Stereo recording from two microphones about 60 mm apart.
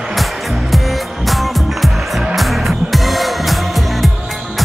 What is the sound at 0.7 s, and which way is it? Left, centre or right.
Music, centre.